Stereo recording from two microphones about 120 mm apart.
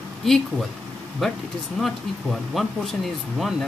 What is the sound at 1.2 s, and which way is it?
Speech, centre (ahead or behind).